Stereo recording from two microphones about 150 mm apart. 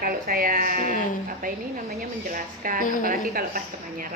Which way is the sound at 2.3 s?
65° right (ahead or behind).